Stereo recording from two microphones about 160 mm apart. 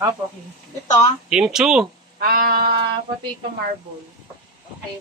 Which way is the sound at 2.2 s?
70° right (ahead or behind).